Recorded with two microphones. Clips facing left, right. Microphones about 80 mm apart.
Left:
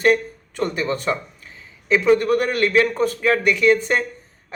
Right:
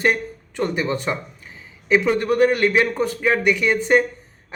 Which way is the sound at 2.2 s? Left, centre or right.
Right.